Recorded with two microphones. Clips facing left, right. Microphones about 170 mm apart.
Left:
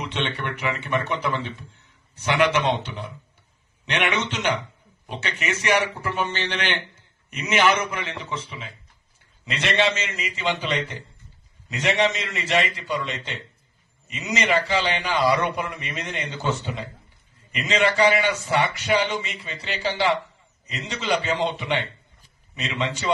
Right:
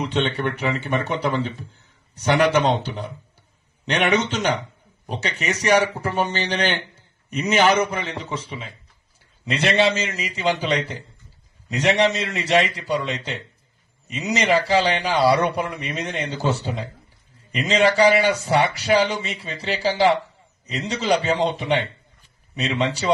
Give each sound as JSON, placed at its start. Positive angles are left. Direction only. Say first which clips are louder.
{"t": 0.0, "sound": "speech", "louder": "right 6 dB", "side_deg": -35}
{"t": 11.7, "sound": "speech", "louder": "right 3 dB", "side_deg": -35}